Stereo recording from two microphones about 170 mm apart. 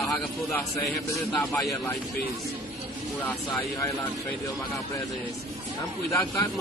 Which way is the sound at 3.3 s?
10° left (ahead or behind).